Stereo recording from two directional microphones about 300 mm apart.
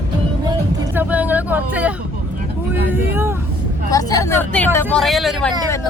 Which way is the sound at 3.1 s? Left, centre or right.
Centre.